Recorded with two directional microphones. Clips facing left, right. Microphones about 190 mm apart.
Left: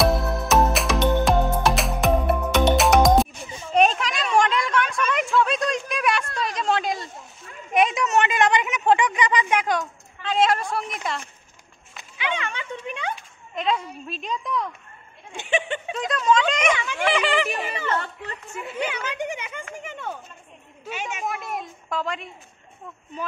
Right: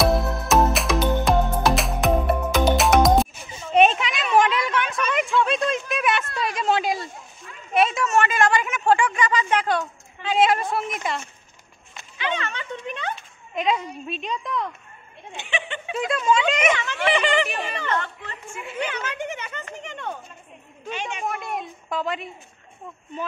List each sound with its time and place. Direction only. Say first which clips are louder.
0.0 s music: even; centre (ahead or behind)
3.7 s a sound: right 2 dB; centre (ahead or behind)
7.7 s a sound: even; 15° left (ahead or behind)
10.2 s a woman's voice: right 1 dB; 5° right (ahead or behind)
12.0 s a sound: right 1 dB; 10° left (ahead or behind)
13.6 s a woman's voice: right 1 dB; 5° right (ahead or behind)
15.3 s speech: left 5 dB; 45° left (ahead or behind)
15.9 s speech: even; 10° right (ahead or behind)
16.7 s a woman's voice: right 1 dB; 10° left (ahead or behind)